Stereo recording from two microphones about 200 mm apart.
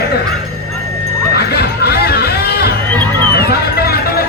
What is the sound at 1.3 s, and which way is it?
Music, 55° left (ahead or behind).